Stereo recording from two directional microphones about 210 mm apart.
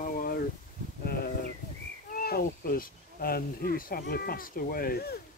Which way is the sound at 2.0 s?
45° left (ahead or behind).